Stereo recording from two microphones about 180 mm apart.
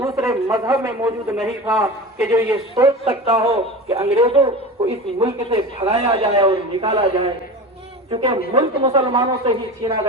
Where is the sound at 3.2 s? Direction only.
35° right (ahead or behind).